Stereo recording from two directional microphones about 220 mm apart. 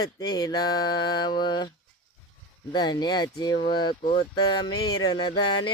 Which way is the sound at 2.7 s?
20° left (ahead or behind).